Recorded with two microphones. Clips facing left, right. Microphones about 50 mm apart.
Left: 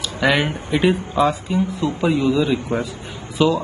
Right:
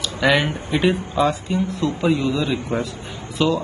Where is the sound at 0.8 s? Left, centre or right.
Centre.